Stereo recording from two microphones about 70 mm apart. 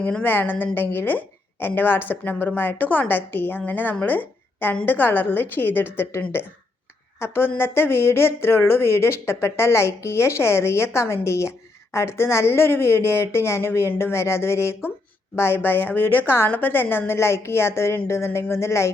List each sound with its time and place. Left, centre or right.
0.0 s a woman's voice: left
7.2 s speech: left